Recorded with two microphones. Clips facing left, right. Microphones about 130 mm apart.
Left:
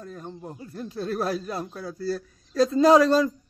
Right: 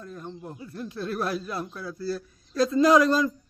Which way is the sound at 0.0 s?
35° left (ahead or behind).